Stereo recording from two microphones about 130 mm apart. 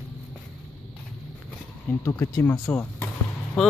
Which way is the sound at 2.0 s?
25° left (ahead or behind).